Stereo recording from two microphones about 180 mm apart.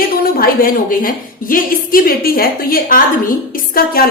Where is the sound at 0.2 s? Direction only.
55° left (ahead or behind).